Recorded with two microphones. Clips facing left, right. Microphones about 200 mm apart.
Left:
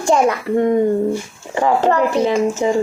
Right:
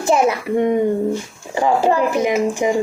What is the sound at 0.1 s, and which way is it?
Speech, 10° right (ahead or behind).